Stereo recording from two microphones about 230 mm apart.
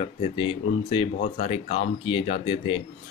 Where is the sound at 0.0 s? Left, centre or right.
Left.